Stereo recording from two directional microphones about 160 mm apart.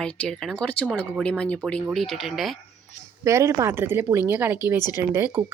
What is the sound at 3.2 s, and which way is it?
Speech, 20° right (ahead or behind).